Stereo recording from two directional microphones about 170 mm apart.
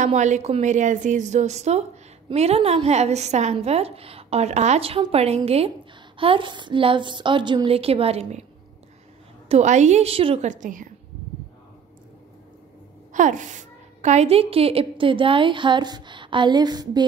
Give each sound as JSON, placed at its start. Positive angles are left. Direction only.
{"t": 0.0, "sound": "a woman's voice", "side_deg": -45}
{"t": 9.5, "sound": "a woman's voice", "side_deg": -45}
{"t": 13.1, "sound": "a woman's voice", "side_deg": -45}